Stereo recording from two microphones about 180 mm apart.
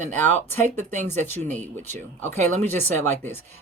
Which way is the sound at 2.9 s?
40° right (ahead or behind).